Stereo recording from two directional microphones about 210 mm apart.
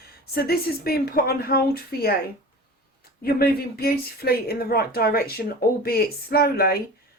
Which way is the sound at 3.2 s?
45° left (ahead or behind).